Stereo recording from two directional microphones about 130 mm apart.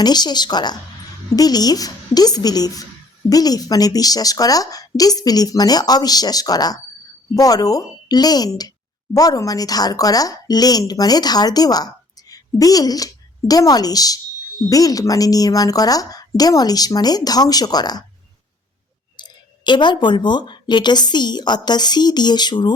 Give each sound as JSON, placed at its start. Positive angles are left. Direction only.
{"t": 0.0, "sound": "a woman's voice", "side_deg": 35}
{"t": 19.1, "sound": "speech", "side_deg": 35}